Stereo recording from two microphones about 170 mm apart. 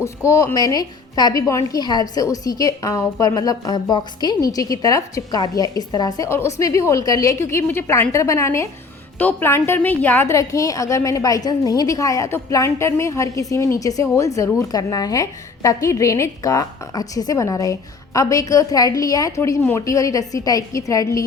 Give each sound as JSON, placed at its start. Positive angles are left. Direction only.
{"t": 0.3, "sound": "a woman's voice", "side_deg": 15}